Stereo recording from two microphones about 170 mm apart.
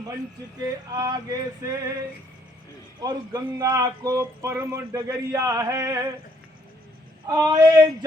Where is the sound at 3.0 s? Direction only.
25° right (ahead or behind).